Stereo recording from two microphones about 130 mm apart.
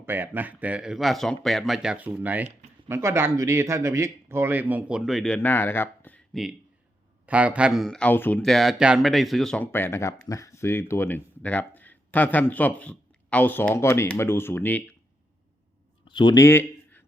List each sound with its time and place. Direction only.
0.0 s speech: 15° right (ahead or behind); by 5.4 s 5° left (ahead or behind)
5.4 s speech: 15° left (ahead or behind)
6.3 s speech: centre (ahead or behind); by 8.4 s 15° left (ahead or behind)
8.4 s speech: centre (ahead or behind)
9.7 s speech: 20° left (ahead or behind)
16.0 s speech: 35° left (ahead or behind)
16.4 s a sound: 20° left (ahead or behind)